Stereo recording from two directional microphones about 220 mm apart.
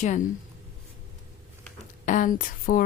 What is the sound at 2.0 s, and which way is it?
Speech, 35° left (ahead or behind).